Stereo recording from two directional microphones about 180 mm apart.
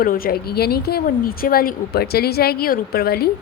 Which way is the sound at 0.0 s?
55° left (ahead or behind).